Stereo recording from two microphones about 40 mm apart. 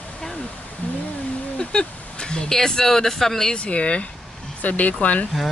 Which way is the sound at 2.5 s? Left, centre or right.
Centre.